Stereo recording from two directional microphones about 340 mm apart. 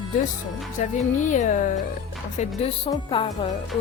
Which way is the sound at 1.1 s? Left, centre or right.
Left.